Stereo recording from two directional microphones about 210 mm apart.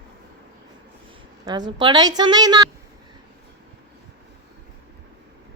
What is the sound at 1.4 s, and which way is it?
A woman's voice, 20° right (ahead or behind).